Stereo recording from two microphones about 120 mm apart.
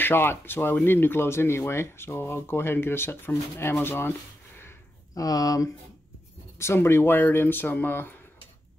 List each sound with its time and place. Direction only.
0.0 s speech: 20° left (ahead or behind)
4.6 s a sound: 25° left (ahead or behind)
6.6 s speech: 20° left (ahead or behind)